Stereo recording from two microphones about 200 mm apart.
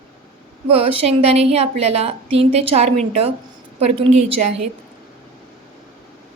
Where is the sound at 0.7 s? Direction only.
30° right (ahead or behind).